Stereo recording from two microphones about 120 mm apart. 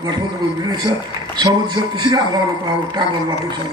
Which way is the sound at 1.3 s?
35° right (ahead or behind).